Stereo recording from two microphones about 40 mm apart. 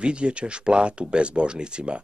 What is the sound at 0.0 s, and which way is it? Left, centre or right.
Speech, right.